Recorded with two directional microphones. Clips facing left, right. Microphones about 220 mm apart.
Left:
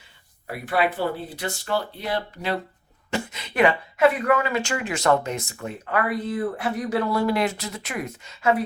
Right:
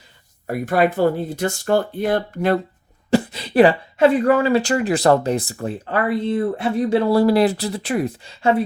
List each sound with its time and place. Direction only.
0.4 s speech: 45° right (ahead or behind)
3.1 s a woman's voice: 35° right (ahead or behind)